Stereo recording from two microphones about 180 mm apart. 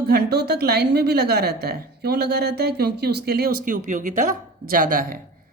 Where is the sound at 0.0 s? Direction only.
65° right (ahead or behind).